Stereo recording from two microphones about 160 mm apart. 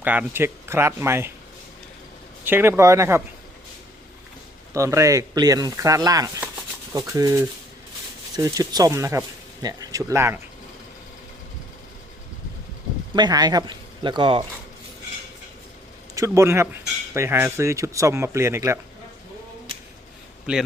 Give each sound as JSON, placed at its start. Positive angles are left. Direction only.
{"t": 0.0, "sound": "speech", "side_deg": -10}
{"t": 2.4, "sound": "speech", "side_deg": -10}
{"t": 4.7, "sound": "speech", "side_deg": -20}
{"t": 13.1, "sound": "speech", "side_deg": -25}
{"t": 16.1, "sound": "speech", "side_deg": -20}